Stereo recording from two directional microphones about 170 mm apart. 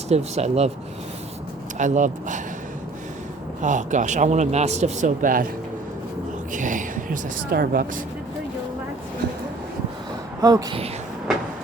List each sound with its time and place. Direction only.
0.1 s speech: 40° right (ahead or behind)
1.8 s speech: 45° right (ahead or behind)
3.6 s speech: 45° right (ahead or behind)
6.5 s a woman's voice: 50° right (ahead or behind); by 7.9 s 65° right (ahead or behind)
10.4 s speech: 20° right (ahead or behind)